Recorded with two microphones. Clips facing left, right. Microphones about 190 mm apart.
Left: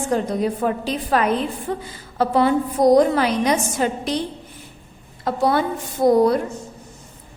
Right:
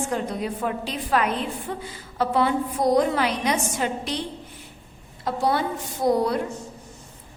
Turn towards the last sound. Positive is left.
turn(degrees=45)  # may be behind; listen again after turning